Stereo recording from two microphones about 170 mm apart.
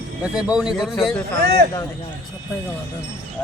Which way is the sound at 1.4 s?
70° right (ahead or behind).